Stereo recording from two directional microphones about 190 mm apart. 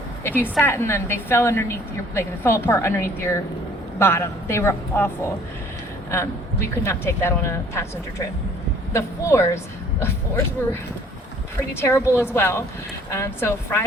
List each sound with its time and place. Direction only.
0.6 s a woman's voice: 15° left (ahead or behind)
8.9 s a woman's voice: 15° left (ahead or behind)